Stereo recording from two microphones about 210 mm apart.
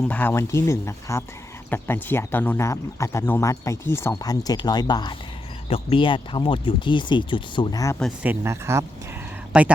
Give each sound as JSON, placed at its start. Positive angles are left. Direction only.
{"t": 0.1, "sound": "speech", "side_deg": 10}
{"t": 8.2, "sound": "speech", "side_deg": -10}